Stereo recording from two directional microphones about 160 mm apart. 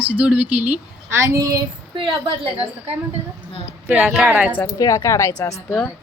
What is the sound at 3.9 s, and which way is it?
Speech, 5° right (ahead or behind).